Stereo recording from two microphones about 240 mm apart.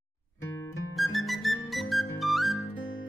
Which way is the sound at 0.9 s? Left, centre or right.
Centre.